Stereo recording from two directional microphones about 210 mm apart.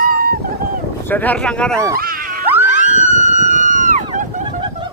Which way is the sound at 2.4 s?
10° right (ahead or behind).